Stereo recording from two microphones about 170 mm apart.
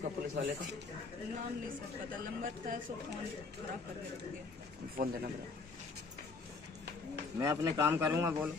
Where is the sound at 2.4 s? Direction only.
55° right (ahead or behind).